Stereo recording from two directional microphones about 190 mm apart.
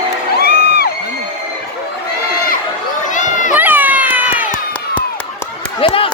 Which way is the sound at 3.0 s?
40° left (ahead or behind).